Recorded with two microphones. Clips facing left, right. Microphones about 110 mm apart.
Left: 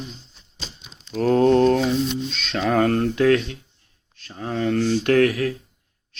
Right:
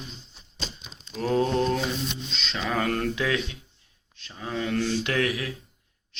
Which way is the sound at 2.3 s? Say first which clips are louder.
Left 7 dB; 50° left (ahead or behind).